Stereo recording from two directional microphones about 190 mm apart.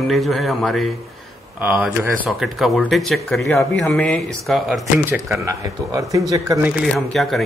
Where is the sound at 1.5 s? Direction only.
10° right (ahead or behind).